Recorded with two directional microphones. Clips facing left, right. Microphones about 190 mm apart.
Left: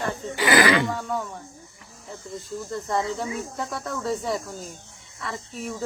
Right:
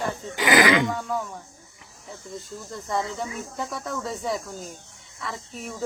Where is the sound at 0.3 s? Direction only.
20° right (ahead or behind).